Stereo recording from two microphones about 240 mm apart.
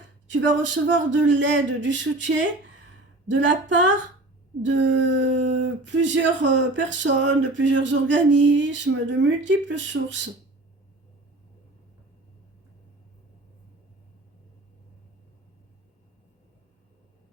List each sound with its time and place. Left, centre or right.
0.3 s speech: right